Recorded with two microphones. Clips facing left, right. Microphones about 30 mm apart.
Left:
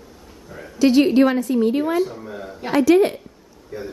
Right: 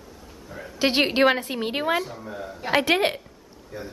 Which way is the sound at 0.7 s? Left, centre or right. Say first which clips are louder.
Left 6 dB; right.